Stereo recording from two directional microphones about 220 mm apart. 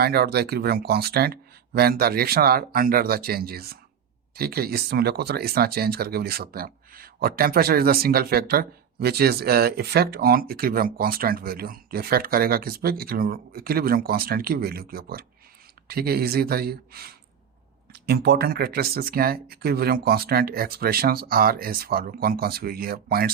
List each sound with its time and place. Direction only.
0.0 s speech: 45° right (ahead or behind)